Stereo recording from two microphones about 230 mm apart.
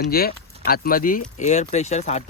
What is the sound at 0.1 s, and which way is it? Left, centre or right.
Speech, left.